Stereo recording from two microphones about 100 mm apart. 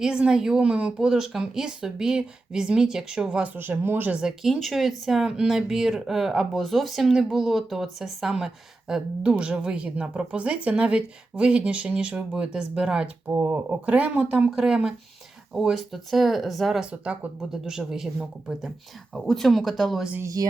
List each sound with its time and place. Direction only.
0.0 s speech: 10° right (ahead or behind)
4.2 s speech: 5° right (ahead or behind)
13.2 s speech: 20° right (ahead or behind); by 16.9 s centre (ahead or behind)
16.9 s speech: 10° right (ahead or behind)
20.2 s speech: 35° right (ahead or behind)